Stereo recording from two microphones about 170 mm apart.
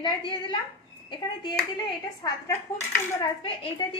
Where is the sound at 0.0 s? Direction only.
30° left (ahead or behind).